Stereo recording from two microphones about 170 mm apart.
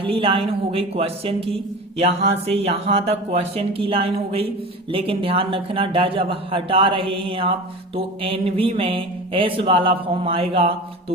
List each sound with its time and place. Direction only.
0.0 s speech: 35° right (ahead or behind)